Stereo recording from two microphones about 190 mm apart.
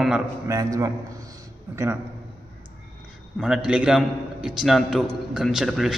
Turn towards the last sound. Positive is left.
turn(degrees=0)  # may be behind; listen again after turning